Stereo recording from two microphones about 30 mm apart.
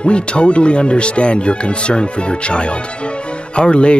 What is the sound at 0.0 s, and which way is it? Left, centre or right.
Speech, left.